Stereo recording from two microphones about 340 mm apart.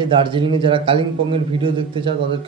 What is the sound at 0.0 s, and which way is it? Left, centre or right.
A man's voice, centre.